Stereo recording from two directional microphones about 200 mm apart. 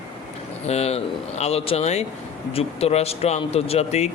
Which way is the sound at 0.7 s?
30° left (ahead or behind).